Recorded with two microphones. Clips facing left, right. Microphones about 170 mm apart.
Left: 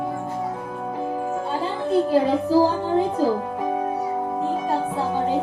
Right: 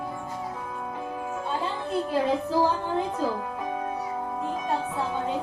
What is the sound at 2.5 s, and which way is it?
Speech, 30° left (ahead or behind).